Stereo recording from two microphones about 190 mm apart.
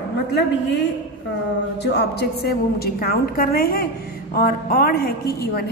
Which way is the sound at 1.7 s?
60° left (ahead or behind).